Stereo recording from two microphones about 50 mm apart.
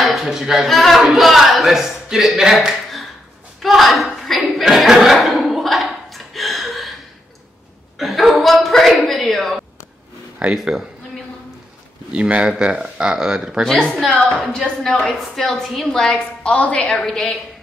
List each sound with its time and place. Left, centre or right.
0.0 s a woman's voice: centre
0.7 s a man's voice: centre
3.6 s a sound: centre
8.0 s a man's voice: centre
12.1 s speech: right
13.6 s a man's voice: centre
16.1 s a woman's voice: left
17.0 s a woman's voice: centre